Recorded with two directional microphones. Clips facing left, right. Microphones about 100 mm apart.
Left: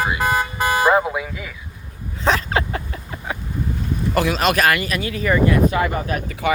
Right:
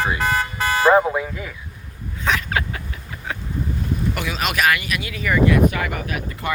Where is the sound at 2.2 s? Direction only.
30° left (ahead or behind).